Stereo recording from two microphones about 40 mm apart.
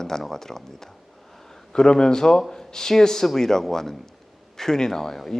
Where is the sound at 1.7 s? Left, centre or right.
Centre.